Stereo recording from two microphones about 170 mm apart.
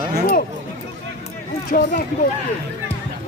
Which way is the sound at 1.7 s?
55° left (ahead or behind).